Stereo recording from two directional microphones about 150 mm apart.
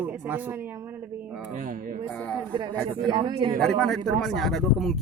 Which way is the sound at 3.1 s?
30° right (ahead or behind).